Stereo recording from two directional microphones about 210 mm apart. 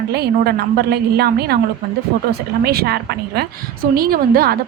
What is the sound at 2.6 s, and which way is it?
A woman's voice, 50° right (ahead or behind).